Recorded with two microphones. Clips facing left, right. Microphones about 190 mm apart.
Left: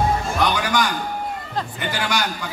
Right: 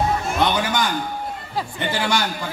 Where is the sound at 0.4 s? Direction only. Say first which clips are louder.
Right 1 dB; 25° right (ahead or behind).